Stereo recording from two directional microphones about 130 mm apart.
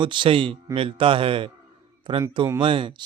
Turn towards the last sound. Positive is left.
turn(degrees=-40)  # may be behind; listen again after turning